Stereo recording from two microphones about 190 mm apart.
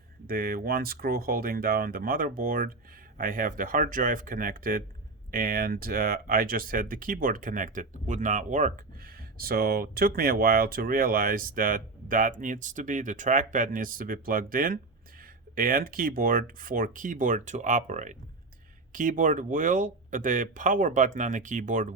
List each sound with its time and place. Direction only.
0.3 s speech: 50° right (ahead or behind)